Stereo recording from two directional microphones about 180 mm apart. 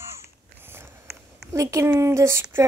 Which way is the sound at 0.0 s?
15° right (ahead or behind).